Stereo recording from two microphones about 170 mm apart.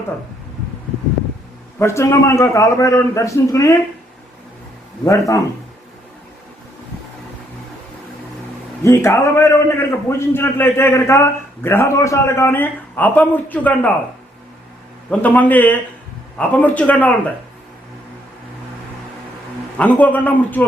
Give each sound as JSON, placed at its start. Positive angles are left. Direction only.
{"t": 1.8, "sound": "a man's voice", "side_deg": 15}
{"t": 8.8, "sound": "a man's voice", "side_deg": 15}
{"t": 15.1, "sound": "a man's voice", "side_deg": 10}
{"t": 19.8, "sound": "a man's voice", "side_deg": 10}